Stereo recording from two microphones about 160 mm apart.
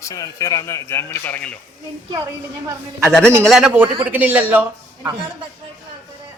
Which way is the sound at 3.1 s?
5° left (ahead or behind).